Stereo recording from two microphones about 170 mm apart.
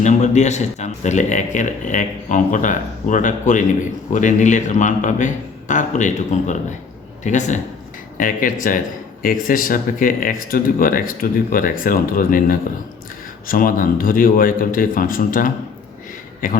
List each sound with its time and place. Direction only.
0.0 s a man's voice: 45° left (ahead or behind)